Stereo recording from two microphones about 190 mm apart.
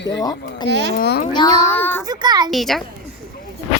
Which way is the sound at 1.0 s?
55° left (ahead or behind).